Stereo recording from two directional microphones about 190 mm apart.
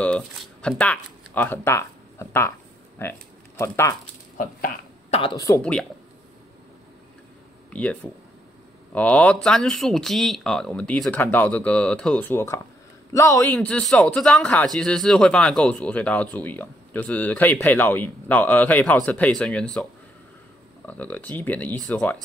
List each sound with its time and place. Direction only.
0.0 s speech: 5° left (ahead or behind)
3.0 s a sound: 15° left (ahead or behind)
4.4 s speech: 45° left (ahead or behind)
5.1 s speech: 25° left (ahead or behind)
5.6 s speech: 5° left (ahead or behind)
7.7 s a man's voice: 5° left (ahead or behind)